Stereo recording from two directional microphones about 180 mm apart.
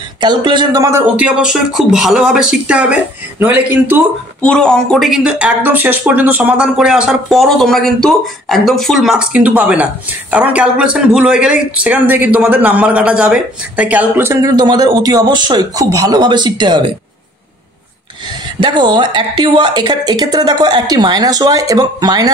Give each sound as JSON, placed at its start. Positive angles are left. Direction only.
{"t": 0.2, "sound": "a woman's voice", "side_deg": -25}
{"t": 1.1, "sound": "speech", "side_deg": -5}
{"t": 4.4, "sound": "speech", "side_deg": 5}
{"t": 18.6, "sound": "a woman's voice", "side_deg": -25}